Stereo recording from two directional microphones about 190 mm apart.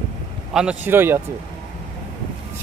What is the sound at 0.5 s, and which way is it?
Speech, 10° right (ahead or behind).